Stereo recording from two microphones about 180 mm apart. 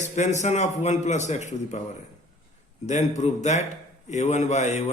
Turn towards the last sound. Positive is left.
turn(degrees=40)  # may be behind; listen again after turning